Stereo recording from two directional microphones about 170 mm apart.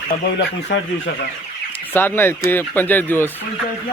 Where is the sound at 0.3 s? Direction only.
90° left.